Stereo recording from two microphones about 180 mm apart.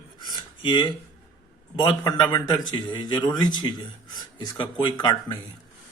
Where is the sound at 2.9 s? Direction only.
25° left (ahead or behind).